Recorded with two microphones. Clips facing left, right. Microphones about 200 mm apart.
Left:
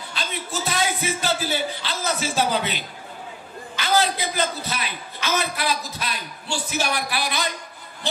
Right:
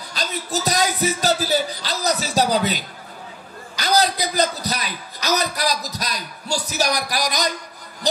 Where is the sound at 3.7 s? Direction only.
40° right (ahead or behind).